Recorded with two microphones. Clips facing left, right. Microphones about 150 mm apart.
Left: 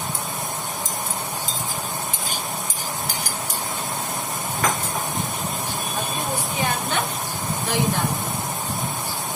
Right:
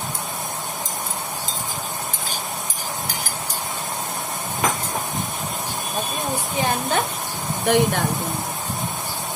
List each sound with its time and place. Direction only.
7.7 s speech: 60° right (ahead or behind)